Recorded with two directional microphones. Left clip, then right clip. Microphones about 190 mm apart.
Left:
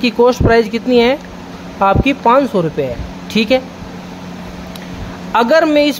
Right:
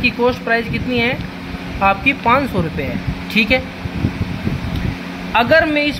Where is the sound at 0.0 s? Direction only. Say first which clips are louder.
Left 5 dB; 55° left (ahead or behind).